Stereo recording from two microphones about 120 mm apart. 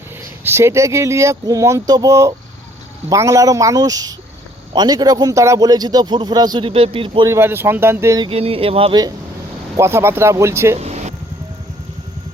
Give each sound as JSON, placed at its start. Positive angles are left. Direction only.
{"t": 0.4, "sound": "a man's voice", "side_deg": -20}
{"t": 6.7, "sound": "speech", "side_deg": -50}
{"t": 7.3, "sound": "speech", "side_deg": -20}
{"t": 8.2, "sound": "speech", "side_deg": -50}
{"t": 9.7, "sound": "speech", "side_deg": -20}
{"t": 10.8, "sound": "a sound", "side_deg": -65}